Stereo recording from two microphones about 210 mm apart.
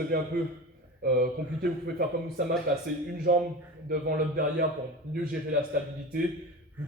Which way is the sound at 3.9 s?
45° right (ahead or behind).